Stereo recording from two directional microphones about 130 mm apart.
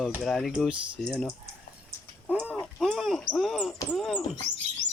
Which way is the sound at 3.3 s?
Centre (ahead or behind).